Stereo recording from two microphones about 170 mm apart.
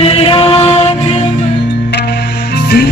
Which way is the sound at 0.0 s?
35° left (ahead or behind).